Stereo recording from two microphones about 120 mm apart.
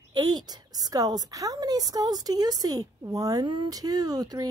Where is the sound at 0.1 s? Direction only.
35° right (ahead or behind).